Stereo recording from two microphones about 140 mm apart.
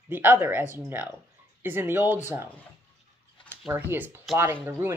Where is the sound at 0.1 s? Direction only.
15° right (ahead or behind).